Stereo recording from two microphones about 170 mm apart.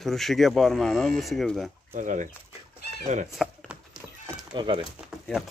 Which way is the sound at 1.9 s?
50° right (ahead or behind).